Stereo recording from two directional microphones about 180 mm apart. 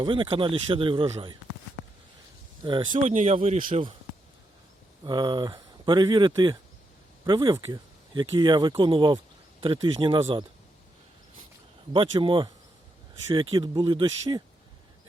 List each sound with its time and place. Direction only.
0.0 s speech: 30° right (ahead or behind)
2.6 s speech: 25° right (ahead or behind)
2.9 s speech: 40° right (ahead or behind)
5.0 s speech: 25° right (ahead or behind)
11.9 s speech: 25° right (ahead or behind)